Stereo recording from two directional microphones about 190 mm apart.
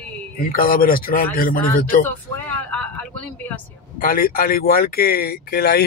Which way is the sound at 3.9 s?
50° left (ahead or behind).